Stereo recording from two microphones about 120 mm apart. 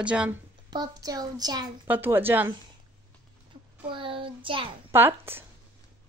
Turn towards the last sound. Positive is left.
turn(degrees=-20)  # may be behind; listen again after turning